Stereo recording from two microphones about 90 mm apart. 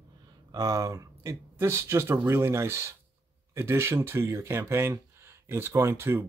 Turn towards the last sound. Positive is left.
turn(degrees=-25)  # may be behind; listen again after turning